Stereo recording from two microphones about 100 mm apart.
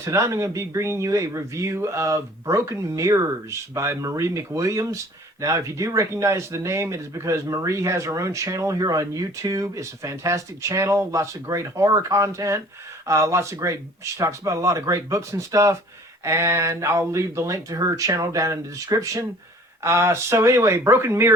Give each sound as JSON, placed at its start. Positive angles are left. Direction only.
{"t": 0.0, "sound": "speech", "side_deg": -30}